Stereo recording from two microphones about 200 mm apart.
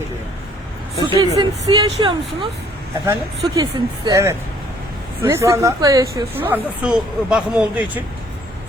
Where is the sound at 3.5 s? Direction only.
20° right (ahead or behind).